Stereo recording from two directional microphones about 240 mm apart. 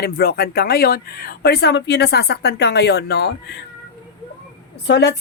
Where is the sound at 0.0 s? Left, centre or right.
Left.